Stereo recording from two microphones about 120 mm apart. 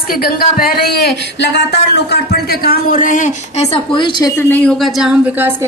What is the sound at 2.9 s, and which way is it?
Speech, 90° left.